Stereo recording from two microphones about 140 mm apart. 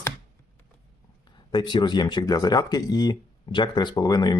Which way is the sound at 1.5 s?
30° left (ahead or behind).